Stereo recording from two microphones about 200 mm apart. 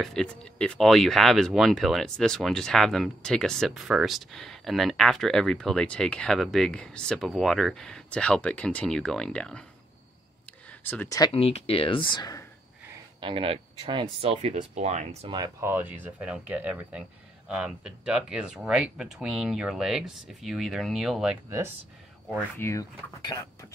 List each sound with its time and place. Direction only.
0.0 s speech: 5° left (ahead or behind)
10.8 s speech: 10° left (ahead or behind)
13.2 s speech: 25° right (ahead or behind)
15.3 s speech: 15° right (ahead or behind)
22.6 s speech: 15° left (ahead or behind)